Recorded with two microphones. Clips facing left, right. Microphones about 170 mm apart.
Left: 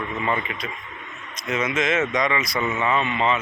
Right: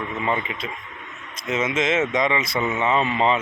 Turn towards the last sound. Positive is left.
turn(degrees=-30)  # may be behind; listen again after turning